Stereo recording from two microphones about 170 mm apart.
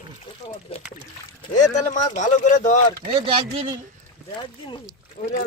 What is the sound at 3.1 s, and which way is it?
Speech, 30° right (ahead or behind).